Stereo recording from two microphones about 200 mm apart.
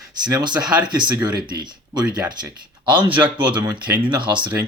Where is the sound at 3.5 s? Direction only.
20° right (ahead or behind).